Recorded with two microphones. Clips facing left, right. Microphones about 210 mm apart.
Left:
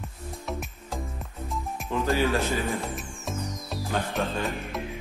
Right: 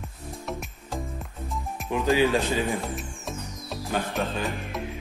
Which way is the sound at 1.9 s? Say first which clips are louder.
Right 3 dB; 15° right (ahead or behind).